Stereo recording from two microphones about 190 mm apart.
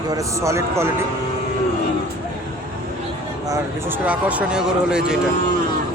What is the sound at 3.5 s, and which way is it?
Speech, 10° right (ahead or behind).